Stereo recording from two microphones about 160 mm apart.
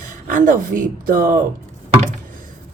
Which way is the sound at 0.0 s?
55° right (ahead or behind).